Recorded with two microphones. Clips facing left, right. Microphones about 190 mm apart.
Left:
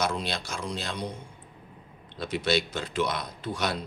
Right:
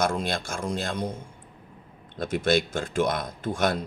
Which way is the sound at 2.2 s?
50° right (ahead or behind).